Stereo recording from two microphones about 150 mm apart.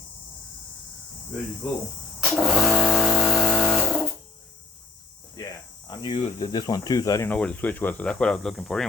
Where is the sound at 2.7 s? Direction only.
Centre (ahead or behind).